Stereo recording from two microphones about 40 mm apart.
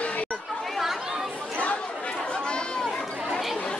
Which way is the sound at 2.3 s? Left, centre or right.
Left.